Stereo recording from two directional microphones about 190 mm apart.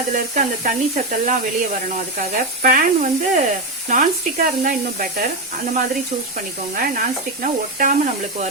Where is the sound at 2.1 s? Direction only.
45° right (ahead or behind).